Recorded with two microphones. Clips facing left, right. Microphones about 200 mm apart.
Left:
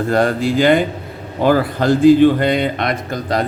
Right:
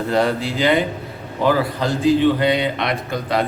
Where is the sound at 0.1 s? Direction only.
50° left (ahead or behind).